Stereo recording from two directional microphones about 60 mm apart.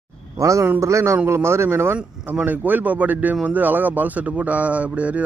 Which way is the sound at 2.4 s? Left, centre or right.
Right.